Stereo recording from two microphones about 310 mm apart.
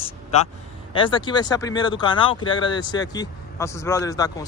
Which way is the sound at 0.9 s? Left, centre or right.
Centre.